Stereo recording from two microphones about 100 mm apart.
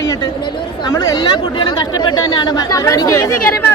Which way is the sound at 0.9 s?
40° left (ahead or behind).